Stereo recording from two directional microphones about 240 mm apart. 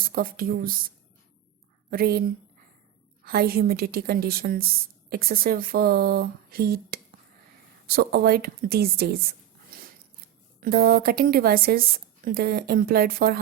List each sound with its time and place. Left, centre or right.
0.0 s speech: right
1.9 s a woman's voice: right
3.2 s a woman's voice: right
9.6 s a sound: right
10.6 s a woman's voice: right